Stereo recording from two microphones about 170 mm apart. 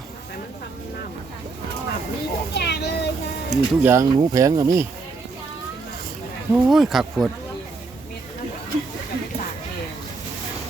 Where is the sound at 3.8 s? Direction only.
15° right (ahead or behind).